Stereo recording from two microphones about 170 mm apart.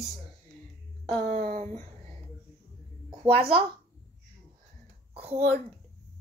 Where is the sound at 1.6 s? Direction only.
40° right (ahead or behind).